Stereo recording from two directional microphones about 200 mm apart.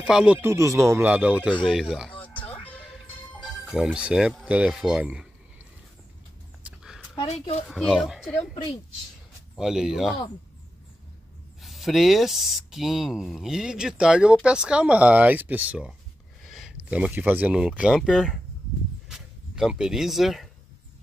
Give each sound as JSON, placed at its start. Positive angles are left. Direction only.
{"t": 0.0, "sound": "speech", "side_deg": -5}
{"t": 2.2, "sound": "music", "side_deg": 10}
{"t": 3.7, "sound": "speech", "side_deg": -5}
{"t": 6.6, "sound": "a sound", "side_deg": -5}
{"t": 7.2, "sound": "speech", "side_deg": 30}
{"t": 7.6, "sound": "speech", "side_deg": 0}
{"t": 9.6, "sound": "speech", "side_deg": -5}
{"t": 11.6, "sound": "speech", "side_deg": 0}
{"t": 19.0, "sound": "a sound", "side_deg": 0}